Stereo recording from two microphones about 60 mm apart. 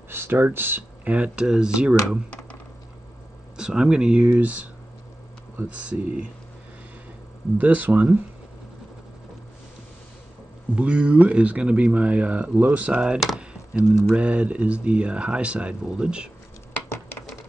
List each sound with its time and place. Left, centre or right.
0.1 s speech: right
1.0 s speech: right
3.5 s speech: centre
5.7 s speech: right
7.5 s speech: right
10.8 s speech: right
13.4 s a sound: centre
14.1 s speech: right